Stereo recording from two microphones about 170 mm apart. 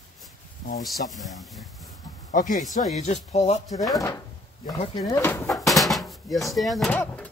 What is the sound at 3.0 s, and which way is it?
Speech, 40° left (ahead or behind).